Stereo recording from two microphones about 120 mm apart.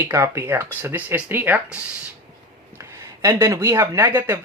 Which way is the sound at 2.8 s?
25° right (ahead or behind).